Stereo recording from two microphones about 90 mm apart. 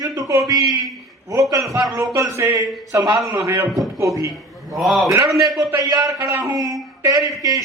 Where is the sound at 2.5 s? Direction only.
50° right (ahead or behind).